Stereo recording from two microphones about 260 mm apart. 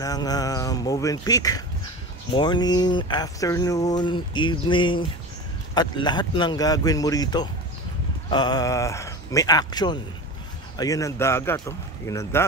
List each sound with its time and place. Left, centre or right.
0.0 s speech: centre